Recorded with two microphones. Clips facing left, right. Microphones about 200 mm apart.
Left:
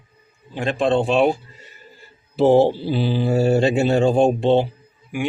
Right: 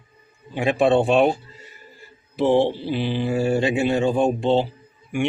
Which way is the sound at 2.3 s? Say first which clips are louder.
Left 4 dB; 35° left (ahead or behind).